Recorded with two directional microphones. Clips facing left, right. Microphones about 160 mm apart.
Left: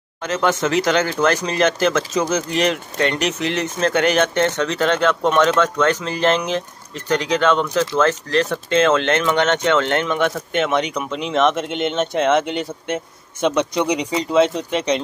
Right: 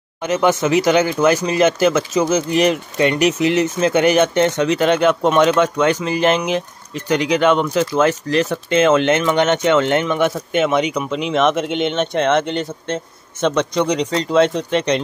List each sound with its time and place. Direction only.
0.2 s speech: 10° right (ahead or behind)